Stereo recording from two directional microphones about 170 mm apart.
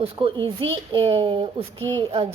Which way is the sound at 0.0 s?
30° right (ahead or behind).